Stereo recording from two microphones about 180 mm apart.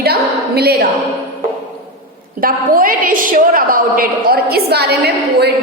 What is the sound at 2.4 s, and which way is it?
A woman's voice, 50° right (ahead or behind).